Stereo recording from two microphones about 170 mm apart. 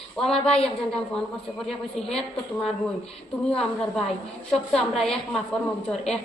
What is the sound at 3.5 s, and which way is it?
Speech, 5° left (ahead or behind).